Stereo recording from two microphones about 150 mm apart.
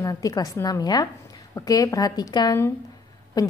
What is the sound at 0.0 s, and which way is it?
A woman's voice, 20° left (ahead or behind).